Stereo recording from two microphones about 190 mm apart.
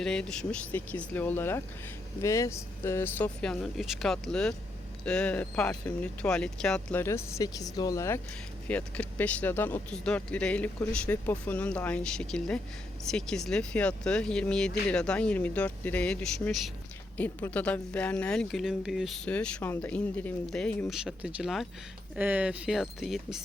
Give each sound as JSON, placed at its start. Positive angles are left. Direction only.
{"t": 0.0, "sound": "speech", "side_deg": 5}